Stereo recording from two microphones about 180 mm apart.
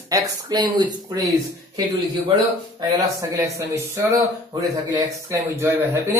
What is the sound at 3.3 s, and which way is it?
Speech, 15° right (ahead or behind).